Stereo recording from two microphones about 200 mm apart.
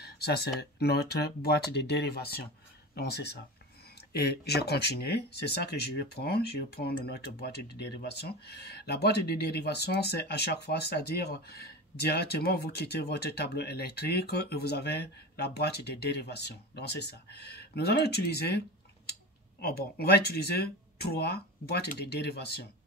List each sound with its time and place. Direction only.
0.0 s speech: 55° left (ahead or behind)
19.6 s speech: 50° left (ahead or behind)